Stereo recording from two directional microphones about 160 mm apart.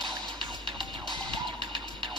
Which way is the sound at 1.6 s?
30° right (ahead or behind).